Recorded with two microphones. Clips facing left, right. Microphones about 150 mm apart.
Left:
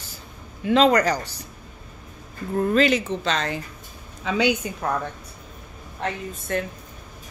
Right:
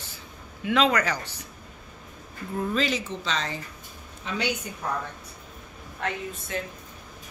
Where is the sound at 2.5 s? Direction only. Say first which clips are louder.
Left 7 dB; 60° left (ahead or behind).